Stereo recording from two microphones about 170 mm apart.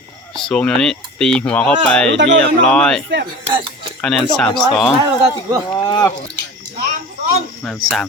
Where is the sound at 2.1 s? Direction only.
90° right.